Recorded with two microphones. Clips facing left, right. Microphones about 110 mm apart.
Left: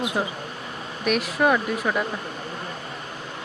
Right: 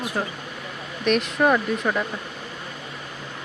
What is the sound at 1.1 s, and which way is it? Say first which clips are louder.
Speech: right 1 dB; 5° left (ahead or behind).